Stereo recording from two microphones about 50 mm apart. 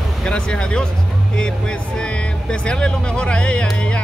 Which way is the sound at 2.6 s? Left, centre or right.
Centre.